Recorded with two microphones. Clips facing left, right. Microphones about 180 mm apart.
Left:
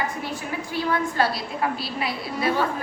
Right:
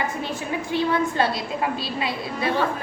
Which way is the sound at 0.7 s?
25° right (ahead or behind).